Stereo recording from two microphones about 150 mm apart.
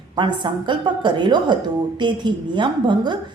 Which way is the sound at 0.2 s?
30° right (ahead or behind).